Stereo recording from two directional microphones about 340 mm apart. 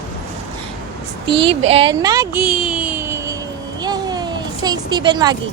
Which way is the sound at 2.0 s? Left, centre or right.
Centre.